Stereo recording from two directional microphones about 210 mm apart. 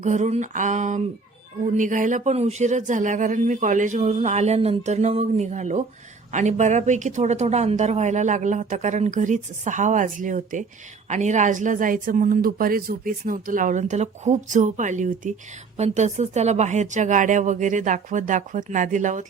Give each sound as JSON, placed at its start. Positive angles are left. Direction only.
{"t": 0.0, "sound": "speech", "side_deg": -35}